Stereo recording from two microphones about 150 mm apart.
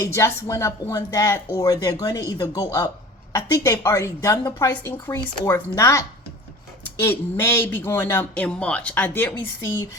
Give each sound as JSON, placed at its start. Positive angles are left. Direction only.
{"t": 0.0, "sound": "a woman's voice", "side_deg": 20}